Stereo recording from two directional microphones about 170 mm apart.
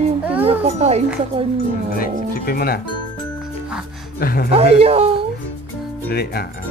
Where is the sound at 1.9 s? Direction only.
65° left (ahead or behind).